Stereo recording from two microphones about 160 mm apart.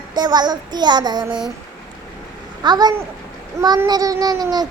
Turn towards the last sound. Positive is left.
turn(degrees=-25)  # may be behind; listen again after turning